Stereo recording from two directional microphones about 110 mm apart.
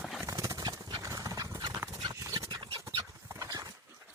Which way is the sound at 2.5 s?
45° right (ahead or behind).